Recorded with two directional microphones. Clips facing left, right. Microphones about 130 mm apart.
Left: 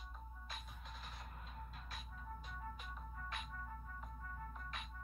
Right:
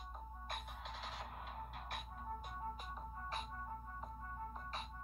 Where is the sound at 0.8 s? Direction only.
90° right; by 2.1 s 65° right (ahead or behind).